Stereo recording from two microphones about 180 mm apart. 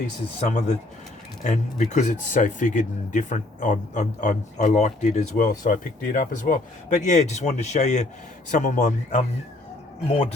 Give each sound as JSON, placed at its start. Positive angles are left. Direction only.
{"t": 0.3, "sound": "speech", "side_deg": 40}